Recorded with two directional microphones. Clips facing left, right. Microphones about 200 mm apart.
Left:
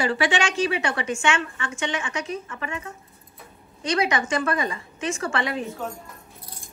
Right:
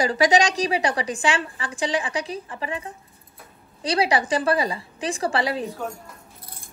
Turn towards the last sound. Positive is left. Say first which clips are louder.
# right 3 dB
turn(degrees=-35)  # may be behind; listen again after turning